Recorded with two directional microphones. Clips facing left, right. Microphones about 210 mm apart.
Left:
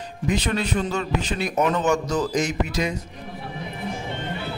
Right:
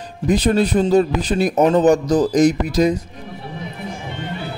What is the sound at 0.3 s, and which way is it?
A man's voice, 35° right (ahead or behind).